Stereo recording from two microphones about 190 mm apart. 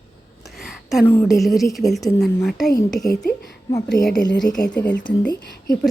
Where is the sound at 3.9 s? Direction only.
Centre (ahead or behind).